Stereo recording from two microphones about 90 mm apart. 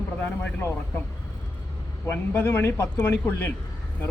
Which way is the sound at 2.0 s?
25° left (ahead or behind).